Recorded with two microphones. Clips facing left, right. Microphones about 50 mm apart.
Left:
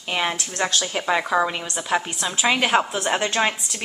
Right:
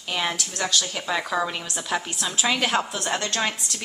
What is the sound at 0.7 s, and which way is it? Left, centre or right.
A woman's voice, left.